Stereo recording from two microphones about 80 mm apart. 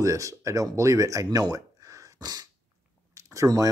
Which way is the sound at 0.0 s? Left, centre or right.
Right.